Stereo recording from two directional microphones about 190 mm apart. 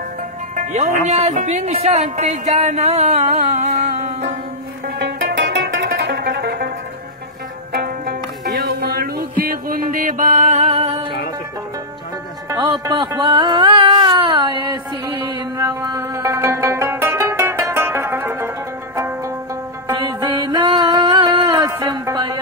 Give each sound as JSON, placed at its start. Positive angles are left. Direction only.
{"t": 0.6, "sound": "speech", "side_deg": -40}
{"t": 4.8, "sound": "music", "side_deg": -60}
{"t": 7.7, "sound": "music", "side_deg": -60}
{"t": 12.4, "sound": "music", "side_deg": -25}